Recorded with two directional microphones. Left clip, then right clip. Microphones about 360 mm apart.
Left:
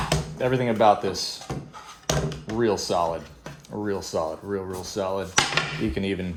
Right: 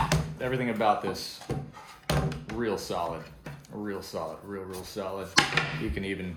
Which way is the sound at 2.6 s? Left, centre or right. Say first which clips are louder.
Left 8 dB; left.